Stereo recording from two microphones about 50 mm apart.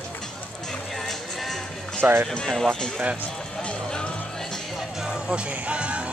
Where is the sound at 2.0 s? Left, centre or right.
Right.